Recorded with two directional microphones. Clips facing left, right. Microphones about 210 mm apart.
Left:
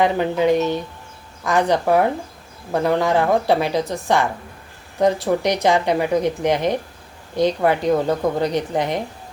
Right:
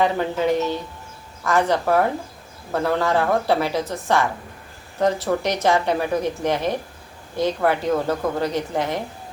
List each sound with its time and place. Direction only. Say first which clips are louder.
0.0 s speech: left 3 dB; 15° left (ahead or behind)